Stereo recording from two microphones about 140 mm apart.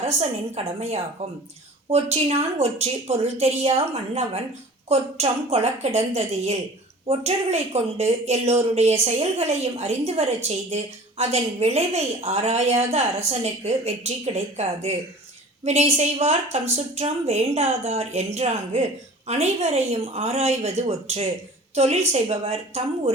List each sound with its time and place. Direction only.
0.0 s a woman's voice: 50° right (ahead or behind)